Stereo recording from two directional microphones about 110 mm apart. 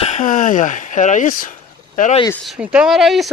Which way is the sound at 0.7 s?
90° left.